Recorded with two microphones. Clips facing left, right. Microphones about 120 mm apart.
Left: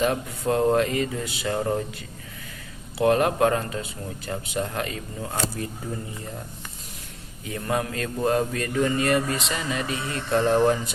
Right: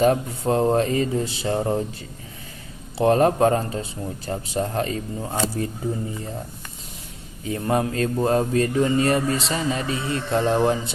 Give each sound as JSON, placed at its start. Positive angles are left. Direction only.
{"t": 0.0, "sound": "speech", "side_deg": -30}
{"t": 3.0, "sound": "speech", "side_deg": -35}
{"t": 7.4, "sound": "speech", "side_deg": -30}